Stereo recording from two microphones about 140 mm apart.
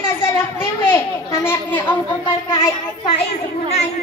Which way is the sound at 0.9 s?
20° left (ahead or behind).